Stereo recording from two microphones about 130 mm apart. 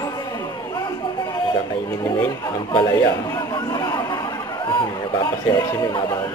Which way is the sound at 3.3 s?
30° left (ahead or behind).